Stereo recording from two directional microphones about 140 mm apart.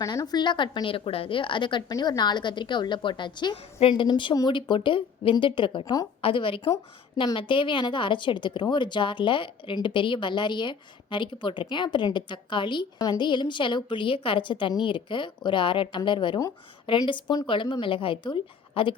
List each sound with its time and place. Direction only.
0.0 s a woman's voice: 25° left (ahead or behind)
6.2 s a woman's voice: 40° left (ahead or behind)